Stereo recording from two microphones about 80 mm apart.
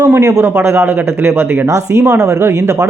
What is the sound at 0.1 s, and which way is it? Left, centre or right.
Speech, right.